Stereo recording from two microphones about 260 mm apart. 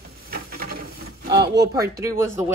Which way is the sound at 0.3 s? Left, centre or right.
Right.